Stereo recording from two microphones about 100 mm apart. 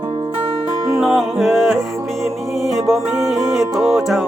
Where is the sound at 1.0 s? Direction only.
Centre (ahead or behind).